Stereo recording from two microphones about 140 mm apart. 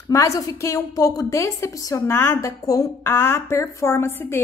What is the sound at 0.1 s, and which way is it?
A woman's voice, 25° left (ahead or behind).